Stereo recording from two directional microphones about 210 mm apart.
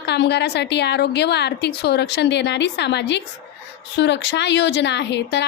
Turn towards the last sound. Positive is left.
turn(degrees=55)  # may be behind; listen again after turning